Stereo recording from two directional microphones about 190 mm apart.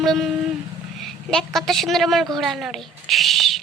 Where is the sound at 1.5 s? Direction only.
Centre (ahead or behind).